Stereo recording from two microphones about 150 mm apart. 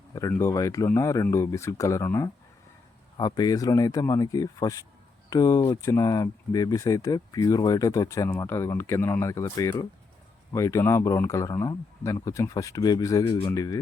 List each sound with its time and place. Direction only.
0.1 s speech: 20° left (ahead or behind)